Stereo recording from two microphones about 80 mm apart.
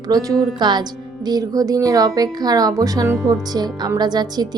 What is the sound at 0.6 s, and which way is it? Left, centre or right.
Speech, right.